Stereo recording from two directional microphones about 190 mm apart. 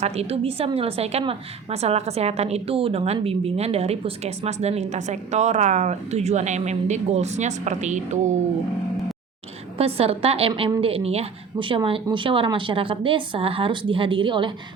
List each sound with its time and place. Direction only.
0.0 s a woman's voice: 35° right (ahead or behind)
9.7 s a woman's voice: 30° right (ahead or behind)